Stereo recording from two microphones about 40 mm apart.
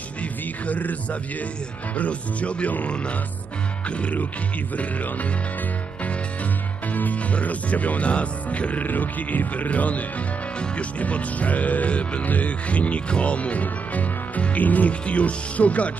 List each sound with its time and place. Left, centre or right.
0.2 s music: left
2.0 s speech: left
3.9 s music: left
6.9 s speech: left
8.8 s speech: left